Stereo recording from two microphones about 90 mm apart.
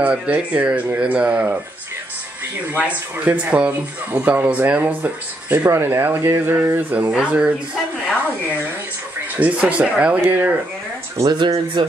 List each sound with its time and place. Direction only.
0.0 s speech: 10° right (ahead or behind)
3.3 s speech: 15° right (ahead or behind)
6.9 s speech: 15° right (ahead or behind)
9.4 s speech: 15° right (ahead or behind)
11.3 s speech: 60° right (ahead or behind)